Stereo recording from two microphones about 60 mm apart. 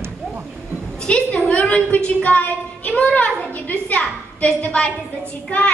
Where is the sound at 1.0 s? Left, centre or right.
Left.